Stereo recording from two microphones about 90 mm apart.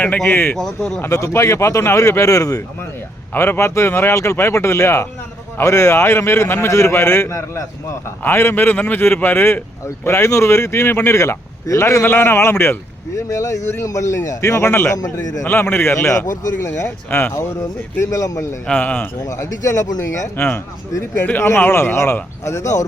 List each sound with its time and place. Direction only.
0.0 s speech: 15° left (ahead or behind)
0.5 s speech: 5° left (ahead or behind)
1.0 s a man's voice: 35° left (ahead or behind)
3.3 s a man's voice: 25° left (ahead or behind)
14.9 s a man's voice: 40° left (ahead or behind)
15.4 s speech: 25° left (ahead or behind)
16.6 s speech: 25° left (ahead or behind)
18.0 s a man's voice: 40° left (ahead or behind)
18.7 s speech: 20° left (ahead or behind)
19.2 s a man's voice: 35° left (ahead or behind)
20.3 s speech: 20° left (ahead or behind)